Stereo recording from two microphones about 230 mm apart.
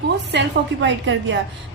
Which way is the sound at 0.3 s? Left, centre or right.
Right.